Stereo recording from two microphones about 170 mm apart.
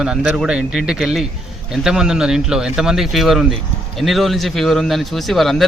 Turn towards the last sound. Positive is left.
turn(degrees=0)  # may be behind; listen again after turning